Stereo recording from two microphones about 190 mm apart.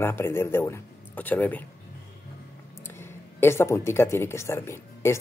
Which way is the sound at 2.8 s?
10° left (ahead or behind).